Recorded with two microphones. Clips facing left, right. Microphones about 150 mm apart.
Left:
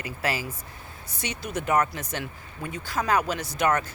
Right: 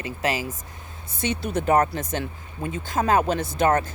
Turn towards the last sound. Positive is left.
turn(degrees=-25)  # may be behind; listen again after turning